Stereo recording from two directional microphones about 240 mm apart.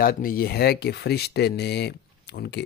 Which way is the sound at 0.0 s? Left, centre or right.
Left.